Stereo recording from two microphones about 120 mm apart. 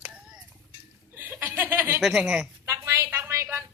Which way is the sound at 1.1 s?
15° right (ahead or behind).